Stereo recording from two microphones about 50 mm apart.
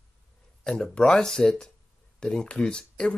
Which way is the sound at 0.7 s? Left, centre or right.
Centre.